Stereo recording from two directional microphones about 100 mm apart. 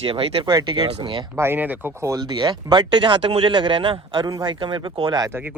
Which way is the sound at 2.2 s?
45° right (ahead or behind).